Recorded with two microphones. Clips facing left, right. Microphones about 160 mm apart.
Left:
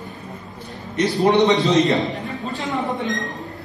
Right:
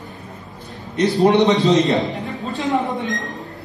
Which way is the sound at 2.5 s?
20° right (ahead or behind).